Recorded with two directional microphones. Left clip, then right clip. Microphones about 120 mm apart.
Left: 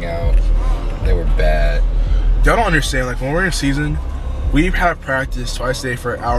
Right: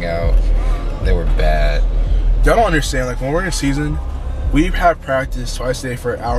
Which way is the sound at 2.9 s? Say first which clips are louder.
Even; 15° left (ahead or behind).